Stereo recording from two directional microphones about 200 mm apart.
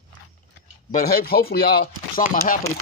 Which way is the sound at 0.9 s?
45° left (ahead or behind).